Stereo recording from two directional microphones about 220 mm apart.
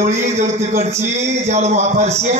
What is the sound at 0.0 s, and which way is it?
A man's voice, 30° right (ahead or behind).